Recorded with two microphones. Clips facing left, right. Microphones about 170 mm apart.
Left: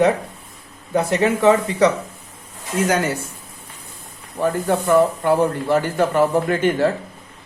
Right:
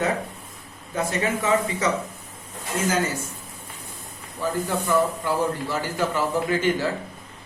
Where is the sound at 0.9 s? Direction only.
70° left (ahead or behind).